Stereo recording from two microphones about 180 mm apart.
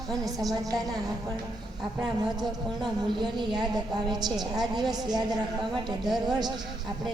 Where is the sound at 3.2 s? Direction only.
25° right (ahead or behind).